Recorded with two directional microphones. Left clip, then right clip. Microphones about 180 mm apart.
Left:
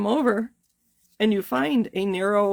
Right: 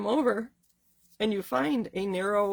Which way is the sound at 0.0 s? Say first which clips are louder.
Left 4 dB; 50° left (ahead or behind).